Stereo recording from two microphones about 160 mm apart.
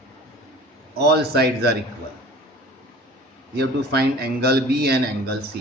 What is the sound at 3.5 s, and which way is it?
A man's voice, 85° right.